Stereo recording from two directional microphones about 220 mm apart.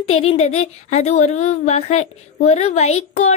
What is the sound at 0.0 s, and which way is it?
A woman's voice, 25° left (ahead or behind).